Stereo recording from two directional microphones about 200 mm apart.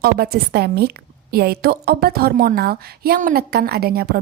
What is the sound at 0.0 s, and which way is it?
A woman's voice, 50° right (ahead or behind).